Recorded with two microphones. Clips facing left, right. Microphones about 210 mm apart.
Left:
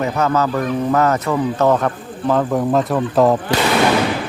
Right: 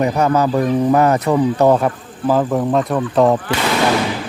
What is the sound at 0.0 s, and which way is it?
Speech, 15° right (ahead or behind).